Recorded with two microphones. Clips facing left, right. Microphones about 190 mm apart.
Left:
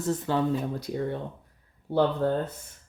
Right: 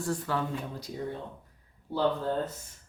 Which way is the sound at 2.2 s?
60° left (ahead or behind).